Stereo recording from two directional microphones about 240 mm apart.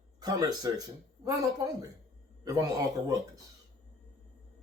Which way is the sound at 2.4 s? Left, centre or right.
Centre.